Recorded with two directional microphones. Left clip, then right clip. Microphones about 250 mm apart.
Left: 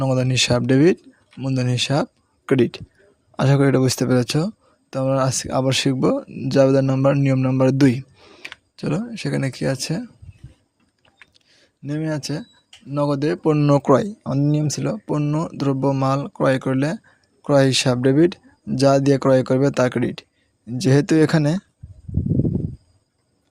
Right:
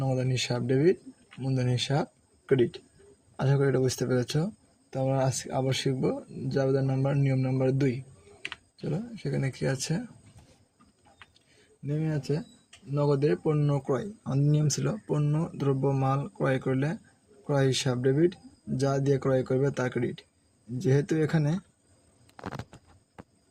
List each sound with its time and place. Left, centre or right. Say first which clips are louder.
0.0 s speech: left 11 dB; left
11.9 s speech: left 6 dB; left